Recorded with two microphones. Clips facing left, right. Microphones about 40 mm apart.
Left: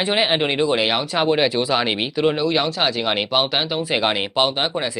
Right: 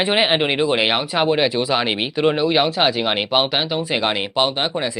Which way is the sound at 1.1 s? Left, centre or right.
Centre.